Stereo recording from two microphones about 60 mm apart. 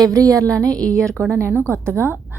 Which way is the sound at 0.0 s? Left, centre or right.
Right.